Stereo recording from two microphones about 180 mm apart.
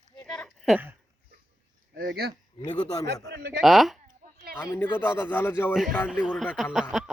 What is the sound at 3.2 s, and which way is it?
Speech, 70° right (ahead or behind).